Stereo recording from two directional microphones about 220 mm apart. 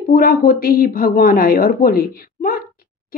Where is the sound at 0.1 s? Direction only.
40° left (ahead or behind).